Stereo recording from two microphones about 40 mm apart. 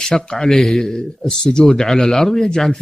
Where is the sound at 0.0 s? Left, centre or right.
Centre.